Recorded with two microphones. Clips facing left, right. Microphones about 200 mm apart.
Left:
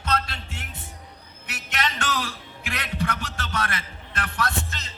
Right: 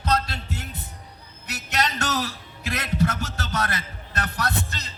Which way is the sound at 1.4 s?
40° right (ahead or behind).